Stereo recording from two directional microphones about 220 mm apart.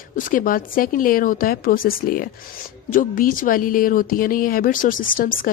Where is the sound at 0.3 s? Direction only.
40° left (ahead or behind).